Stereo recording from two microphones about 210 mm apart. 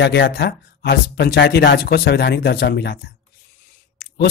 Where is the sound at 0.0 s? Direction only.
55° left (ahead or behind).